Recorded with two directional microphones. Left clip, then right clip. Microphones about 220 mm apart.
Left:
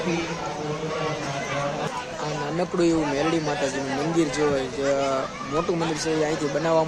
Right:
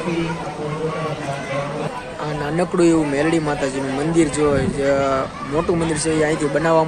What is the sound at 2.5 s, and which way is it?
Speech, 5° right (ahead or behind).